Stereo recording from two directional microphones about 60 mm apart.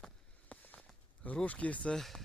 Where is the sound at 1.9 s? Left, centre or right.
Centre.